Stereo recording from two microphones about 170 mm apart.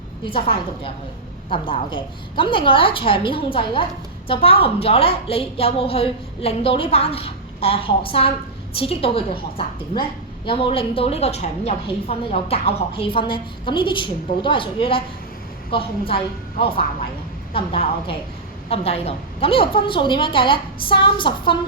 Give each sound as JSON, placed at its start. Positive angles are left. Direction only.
{"t": 0.3, "sound": "a woman's voice", "side_deg": 30}